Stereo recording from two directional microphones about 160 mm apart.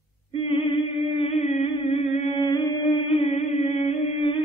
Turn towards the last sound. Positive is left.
turn(degrees=35)  # may be behind; listen again after turning